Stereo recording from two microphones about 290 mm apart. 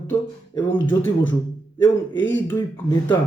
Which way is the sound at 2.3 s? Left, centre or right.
Centre.